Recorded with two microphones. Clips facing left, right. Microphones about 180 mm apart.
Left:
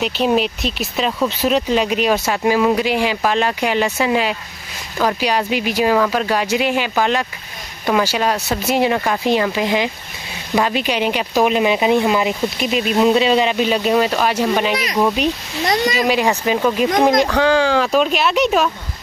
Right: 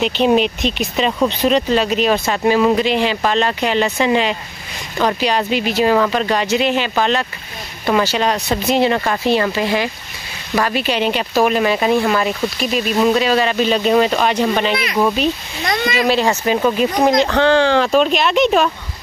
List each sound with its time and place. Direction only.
0.0 s speech: 5° left (ahead or behind)
15.6 s speech: 35° left (ahead or behind)
16.1 s speech: 15° left (ahead or behind)